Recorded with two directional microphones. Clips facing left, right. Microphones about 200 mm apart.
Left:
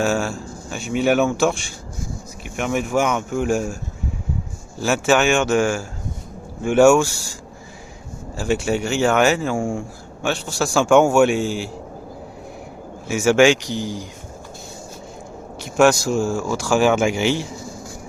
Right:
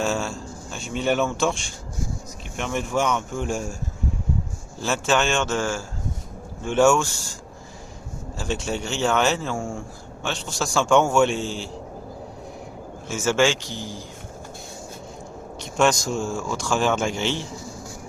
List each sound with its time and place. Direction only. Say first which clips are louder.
0.0 s speech: left 4 dB; 5° left (ahead or behind)
4.8 s speech: left 5 dB; 10° left (ahead or behind)
8.4 s speech: left 7 dB; 10° left (ahead or behind)
13.1 s speech: left 6 dB; 10° left (ahead or behind)
15.6 s speech: left 5 dB; 10° left (ahead or behind)